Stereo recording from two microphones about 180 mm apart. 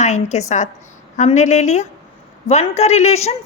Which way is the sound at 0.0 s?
40° left (ahead or behind).